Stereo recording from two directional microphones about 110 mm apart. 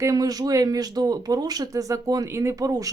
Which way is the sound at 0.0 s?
30° right (ahead or behind).